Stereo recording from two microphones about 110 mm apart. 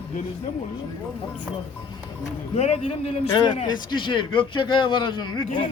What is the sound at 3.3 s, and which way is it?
A man's voice, 40° left (ahead or behind).